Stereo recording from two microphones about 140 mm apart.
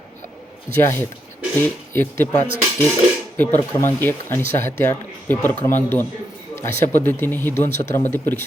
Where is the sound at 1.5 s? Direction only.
15° left (ahead or behind).